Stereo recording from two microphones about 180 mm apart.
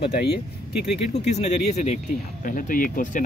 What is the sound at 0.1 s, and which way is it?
Speech, 65° left (ahead or behind).